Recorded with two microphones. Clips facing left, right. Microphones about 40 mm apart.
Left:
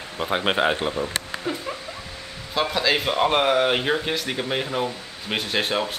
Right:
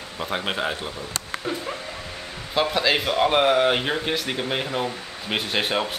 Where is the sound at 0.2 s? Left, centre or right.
Centre.